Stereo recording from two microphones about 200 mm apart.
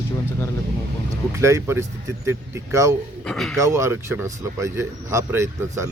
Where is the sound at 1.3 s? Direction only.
15° right (ahead or behind).